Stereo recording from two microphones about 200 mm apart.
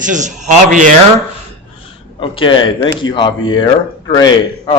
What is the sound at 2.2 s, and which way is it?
A man's voice, 25° left (ahead or behind).